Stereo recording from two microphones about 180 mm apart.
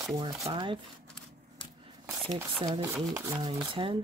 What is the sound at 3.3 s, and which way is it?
Speech, 25° right (ahead or behind).